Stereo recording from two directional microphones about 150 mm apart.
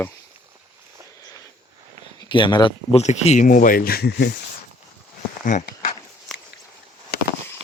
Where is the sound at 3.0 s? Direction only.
50° left (ahead or behind); by 4.3 s 85° left.